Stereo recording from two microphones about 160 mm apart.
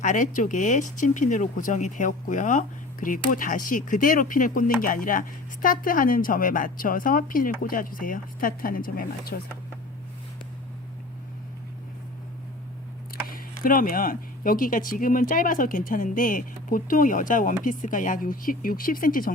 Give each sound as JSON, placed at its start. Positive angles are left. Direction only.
{"t": 0.0, "sound": "speech", "side_deg": 55}
{"t": 13.2, "sound": "speech", "side_deg": 60}